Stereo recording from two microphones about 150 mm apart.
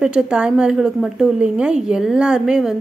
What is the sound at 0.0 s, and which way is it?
A woman's voice, 5° right (ahead or behind).